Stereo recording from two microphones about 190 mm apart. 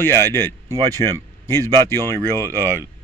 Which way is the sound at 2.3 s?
15° right (ahead or behind).